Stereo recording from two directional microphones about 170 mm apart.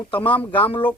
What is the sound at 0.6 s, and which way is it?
Speech, 30° left (ahead or behind).